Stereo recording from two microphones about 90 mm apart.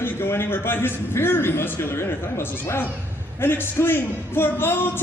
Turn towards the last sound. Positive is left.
turn(degrees=25)  # may be behind; listen again after turning